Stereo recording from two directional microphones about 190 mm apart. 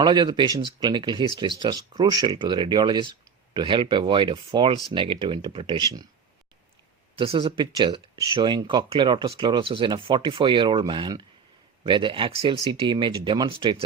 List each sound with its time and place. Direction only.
0.0 s speech: 25° right (ahead or behind)
7.2 s speech: 30° right (ahead or behind)